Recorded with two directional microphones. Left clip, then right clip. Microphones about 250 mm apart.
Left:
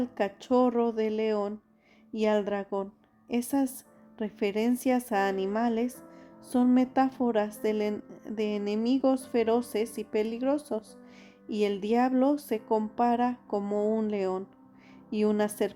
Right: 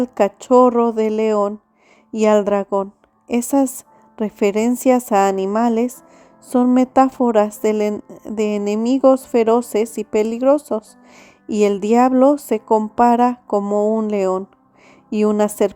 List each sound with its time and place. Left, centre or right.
0.0 s a woman's voice: right